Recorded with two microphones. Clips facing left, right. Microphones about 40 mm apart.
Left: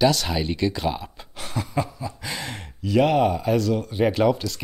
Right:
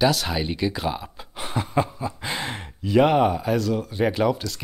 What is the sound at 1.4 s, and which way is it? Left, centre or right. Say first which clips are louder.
Speech: right 3 dB; right.